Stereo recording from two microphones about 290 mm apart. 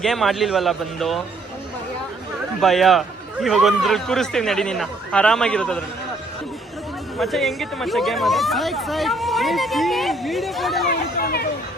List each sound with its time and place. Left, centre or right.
0.0 s speech: centre
2.6 s speech: centre
7.2 s speech: centre
10.8 s speech: left